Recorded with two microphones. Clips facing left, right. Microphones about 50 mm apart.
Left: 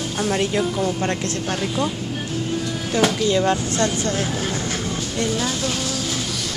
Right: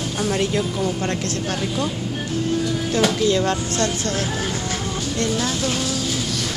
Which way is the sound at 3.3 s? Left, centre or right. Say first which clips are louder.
Left 1 dB; centre.